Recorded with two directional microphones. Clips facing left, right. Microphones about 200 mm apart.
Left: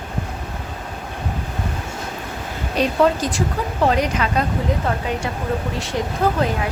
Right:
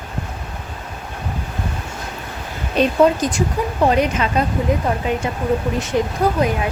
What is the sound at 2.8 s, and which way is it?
A woman's voice, 20° right (ahead or behind).